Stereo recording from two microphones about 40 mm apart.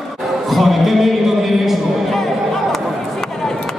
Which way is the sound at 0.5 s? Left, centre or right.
Centre.